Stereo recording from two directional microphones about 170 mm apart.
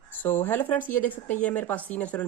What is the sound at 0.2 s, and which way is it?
Speech, 10° left (ahead or behind).